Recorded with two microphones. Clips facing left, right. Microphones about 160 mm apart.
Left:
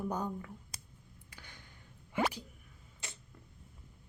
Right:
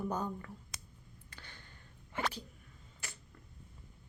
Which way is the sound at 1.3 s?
10° left (ahead or behind).